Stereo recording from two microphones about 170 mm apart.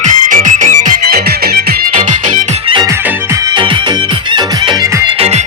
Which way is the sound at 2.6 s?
30° right (ahead or behind).